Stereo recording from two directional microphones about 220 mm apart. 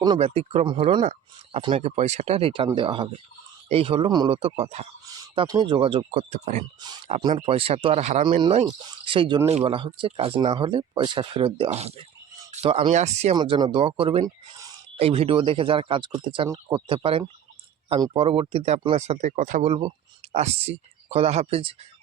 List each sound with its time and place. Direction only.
0.0 s speech: 25° right (ahead or behind)
7.1 s speech: 20° right (ahead or behind)
13.3 s speech: 20° right (ahead or behind)